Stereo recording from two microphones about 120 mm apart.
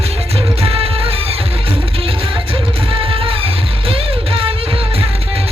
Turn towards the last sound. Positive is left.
turn(degrees=-55)  # may be behind; listen again after turning